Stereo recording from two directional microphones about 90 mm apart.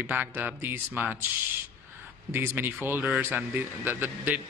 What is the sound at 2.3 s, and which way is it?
Speech, 25° right (ahead or behind).